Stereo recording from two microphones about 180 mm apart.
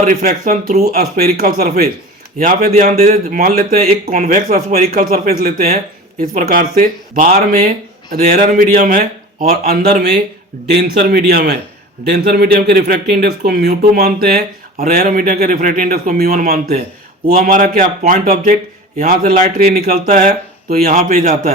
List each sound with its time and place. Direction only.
0.0 s speech: 50° right (ahead or behind)
2.9 s a man's voice: 35° right (ahead or behind)
3.2 s speech: 55° right (ahead or behind)
9.6 s speech: 60° right (ahead or behind)